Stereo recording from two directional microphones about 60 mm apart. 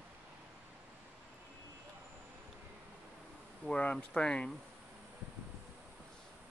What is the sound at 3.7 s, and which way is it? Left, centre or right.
Speech, centre.